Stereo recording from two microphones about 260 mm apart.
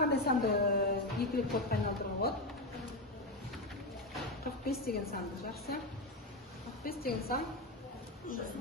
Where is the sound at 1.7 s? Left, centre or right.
Left.